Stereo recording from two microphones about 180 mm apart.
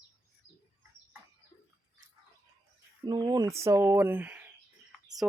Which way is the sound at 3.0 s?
20° right (ahead or behind).